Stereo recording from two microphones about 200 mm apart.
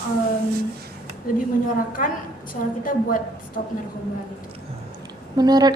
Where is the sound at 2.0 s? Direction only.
40° left (ahead or behind).